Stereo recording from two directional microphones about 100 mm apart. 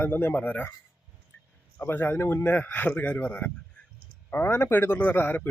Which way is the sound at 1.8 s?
20° left (ahead or behind).